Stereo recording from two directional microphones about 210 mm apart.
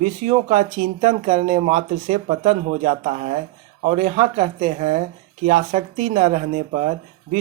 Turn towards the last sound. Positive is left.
turn(degrees=-35)  # may be behind; listen again after turning